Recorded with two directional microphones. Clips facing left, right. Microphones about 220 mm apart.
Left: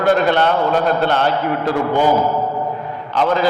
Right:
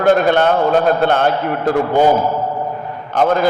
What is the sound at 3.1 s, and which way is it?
Speech, 50° right (ahead or behind).